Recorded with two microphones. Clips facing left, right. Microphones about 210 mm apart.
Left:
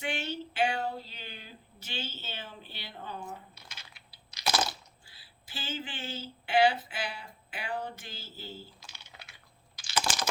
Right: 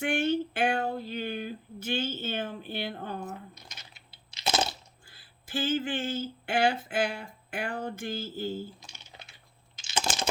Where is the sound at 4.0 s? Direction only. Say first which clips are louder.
Even; 25° right (ahead or behind).